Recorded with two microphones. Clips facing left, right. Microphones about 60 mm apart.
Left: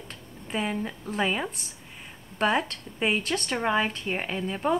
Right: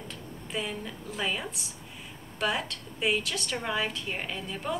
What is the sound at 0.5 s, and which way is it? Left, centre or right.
A woman's voice, left.